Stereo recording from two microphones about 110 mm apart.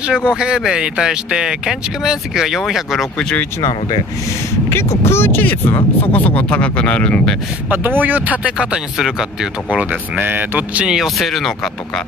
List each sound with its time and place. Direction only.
0.0 s speech: 10° right (ahead or behind)
4.6 s speech: 25° left (ahead or behind)
7.7 s speech: 15° right (ahead or behind); by 11.7 s centre (ahead or behind)